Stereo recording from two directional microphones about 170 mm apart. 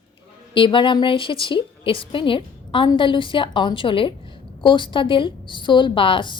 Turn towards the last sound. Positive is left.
turn(degrees=30)  # may be behind; listen again after turning